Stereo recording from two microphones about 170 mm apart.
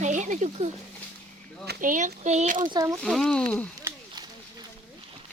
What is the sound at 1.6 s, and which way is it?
Speech, 50° right (ahead or behind).